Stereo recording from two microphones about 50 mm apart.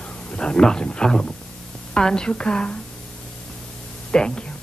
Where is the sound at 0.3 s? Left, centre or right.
Left.